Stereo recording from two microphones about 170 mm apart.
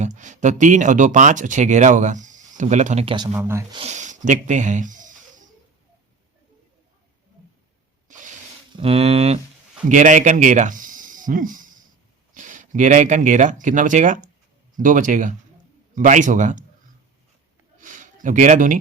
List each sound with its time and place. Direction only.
0.0 s speech: 45° right (ahead or behind)
3.3 s speech: 15° right (ahead or behind)
3.8 s speech: 45° right (ahead or behind)
8.0 s rub: 50° right (ahead or behind)
8.7 s a man's voice: 35° right (ahead or behind)
17.7 s a sound: 50° right (ahead or behind)